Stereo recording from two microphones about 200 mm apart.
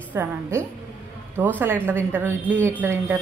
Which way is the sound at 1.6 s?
10° right (ahead or behind).